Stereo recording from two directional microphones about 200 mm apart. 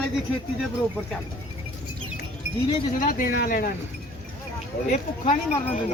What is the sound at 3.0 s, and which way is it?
Speech, 45° left (ahead or behind).